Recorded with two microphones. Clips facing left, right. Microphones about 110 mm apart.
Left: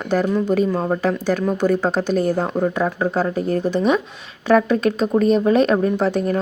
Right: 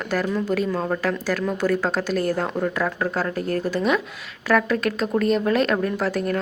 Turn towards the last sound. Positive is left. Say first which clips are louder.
# left 5 dB
turn(degrees=20)  # may be behind; listen again after turning